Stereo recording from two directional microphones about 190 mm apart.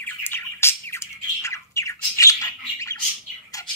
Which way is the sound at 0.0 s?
10° left (ahead or behind).